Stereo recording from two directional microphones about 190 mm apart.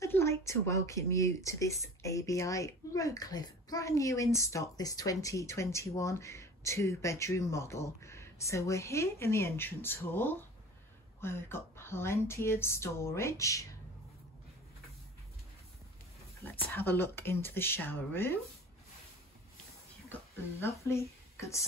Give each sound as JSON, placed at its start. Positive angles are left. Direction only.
{"t": 0.0, "sound": "speech", "side_deg": 15}
{"t": 16.4, "sound": "speech", "side_deg": 10}
{"t": 20.6, "sound": "speech", "side_deg": 15}